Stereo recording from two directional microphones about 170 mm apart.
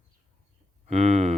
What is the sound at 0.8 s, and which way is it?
Speech, 45° right (ahead or behind).